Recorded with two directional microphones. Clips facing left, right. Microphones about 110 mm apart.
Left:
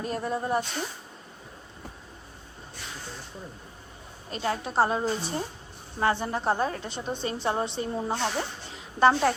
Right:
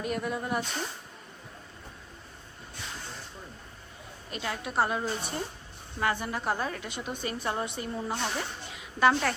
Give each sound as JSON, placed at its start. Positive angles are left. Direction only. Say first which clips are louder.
{"t": 0.0, "sound": "a woman's voice", "louder": "left 2 dB", "side_deg": 30}
{"t": 4.3, "sound": "a woman's voice", "louder": "left 5 dB", "side_deg": 30}